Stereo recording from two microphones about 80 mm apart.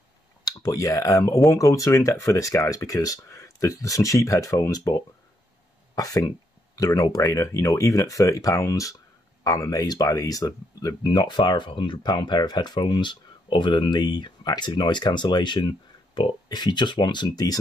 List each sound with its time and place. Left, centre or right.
0.5 s speech: left
11.1 s speech: left